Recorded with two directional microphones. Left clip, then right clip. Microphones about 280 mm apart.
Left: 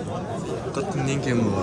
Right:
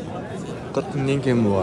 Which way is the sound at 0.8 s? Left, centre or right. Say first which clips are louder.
Right 5 dB; centre.